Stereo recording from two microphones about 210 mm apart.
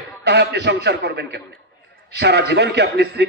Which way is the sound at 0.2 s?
55° right (ahead or behind).